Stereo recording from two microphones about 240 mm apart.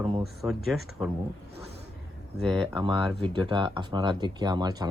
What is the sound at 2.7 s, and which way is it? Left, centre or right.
Speech, centre.